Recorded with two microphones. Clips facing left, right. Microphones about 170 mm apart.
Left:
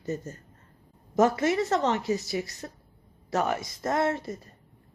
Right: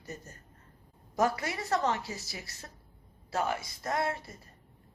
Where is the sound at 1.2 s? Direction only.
25° left (ahead or behind).